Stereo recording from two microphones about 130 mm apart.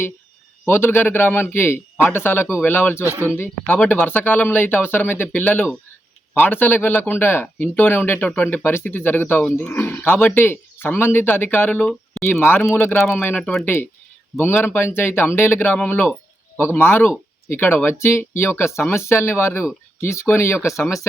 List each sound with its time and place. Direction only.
0.6 s speech: 15° left (ahead or behind)
3.0 s speech: 15° right (ahead or behind)
3.3 s speech: 15° left (ahead or behind)
13.3 s speech: centre (ahead or behind)
14.3 s speech: 15° left (ahead or behind)